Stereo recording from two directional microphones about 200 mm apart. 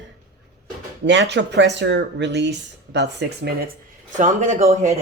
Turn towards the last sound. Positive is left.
turn(degrees=-35)  # may be behind; listen again after turning